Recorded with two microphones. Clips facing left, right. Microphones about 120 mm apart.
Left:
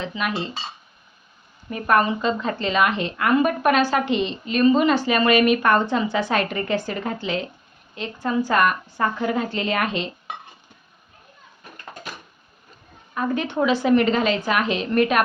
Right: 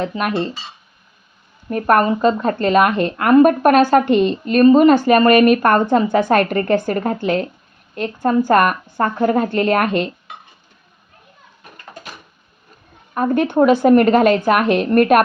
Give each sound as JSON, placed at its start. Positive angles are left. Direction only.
{"t": 0.0, "sound": "a woman's voice", "side_deg": -50}
{"t": 1.7, "sound": "a woman's voice", "side_deg": -50}
{"t": 13.1, "sound": "a woman's voice", "side_deg": -50}